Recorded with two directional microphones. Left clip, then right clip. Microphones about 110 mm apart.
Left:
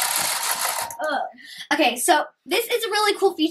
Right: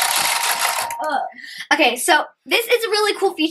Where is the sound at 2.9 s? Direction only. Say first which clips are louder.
Right 2 dB; 15° left (ahead or behind).